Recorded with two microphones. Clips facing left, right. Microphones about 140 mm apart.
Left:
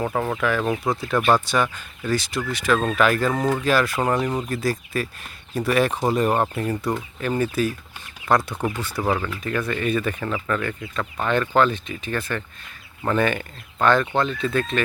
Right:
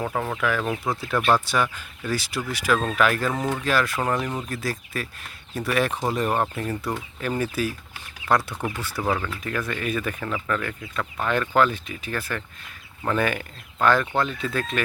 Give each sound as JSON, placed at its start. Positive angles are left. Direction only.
{"t": 0.0, "sound": "speech", "side_deg": 5}
{"t": 4.4, "sound": "speech", "side_deg": 0}
{"t": 9.0, "sound": "speech", "side_deg": 10}